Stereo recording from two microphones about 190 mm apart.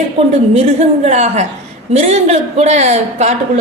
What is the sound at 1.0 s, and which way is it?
A woman's voice, 35° right (ahead or behind).